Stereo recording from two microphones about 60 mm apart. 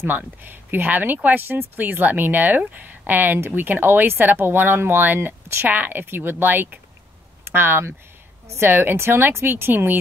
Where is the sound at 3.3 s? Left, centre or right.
Right.